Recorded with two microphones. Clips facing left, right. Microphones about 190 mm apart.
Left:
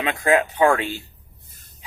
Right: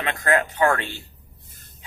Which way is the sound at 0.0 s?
15° left (ahead or behind).